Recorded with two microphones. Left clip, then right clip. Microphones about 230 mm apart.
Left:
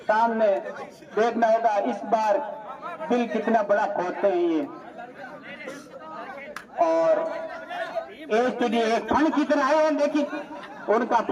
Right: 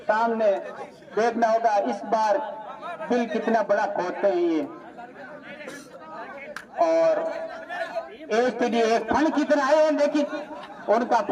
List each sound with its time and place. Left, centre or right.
0.1 s a man's voice: centre
6.5 s a man's voice: centre; by 11.3 s right